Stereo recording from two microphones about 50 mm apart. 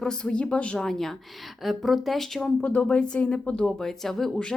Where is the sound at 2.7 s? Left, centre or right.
Left.